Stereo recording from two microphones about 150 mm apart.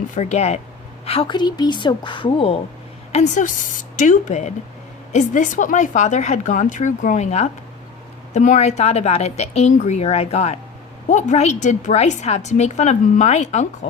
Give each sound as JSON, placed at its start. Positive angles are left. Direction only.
{"t": 0.1, "sound": "a woman's voice", "side_deg": 50}
{"t": 3.1, "sound": "a woman's voice", "side_deg": 50}